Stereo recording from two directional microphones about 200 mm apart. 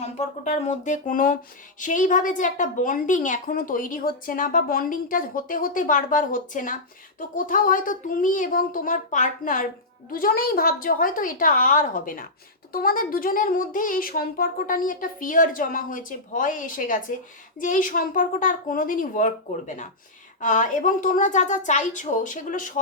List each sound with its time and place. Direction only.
0.0 s a woman's voice: 30° left (ahead or behind)